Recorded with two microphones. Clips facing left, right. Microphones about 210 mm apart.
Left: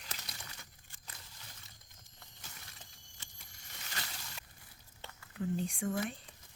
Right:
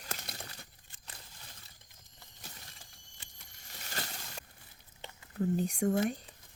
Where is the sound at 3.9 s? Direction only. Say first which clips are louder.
Right 5 dB; 45° right (ahead or behind).